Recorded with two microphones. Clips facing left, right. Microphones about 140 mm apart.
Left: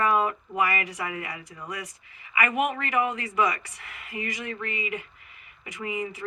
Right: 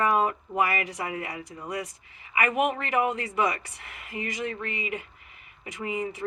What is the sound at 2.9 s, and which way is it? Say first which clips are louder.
Speech: right 1 dB; 40° right (ahead or behind).